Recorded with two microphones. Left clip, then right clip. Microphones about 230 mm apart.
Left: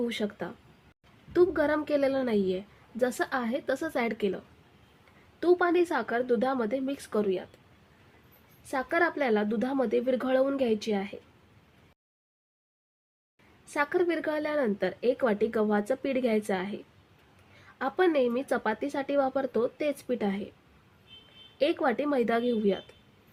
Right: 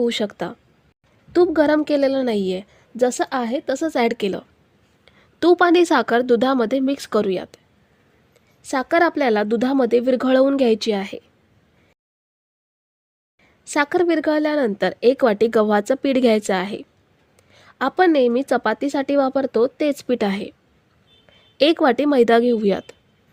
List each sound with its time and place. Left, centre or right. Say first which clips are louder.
0.0 s a woman's voice: right 11 dB; right
8.6 s a woman's voice: right 10 dB; right
13.7 s a woman's voice: right 9 dB; right
21.6 s a woman's voice: right 11 dB; right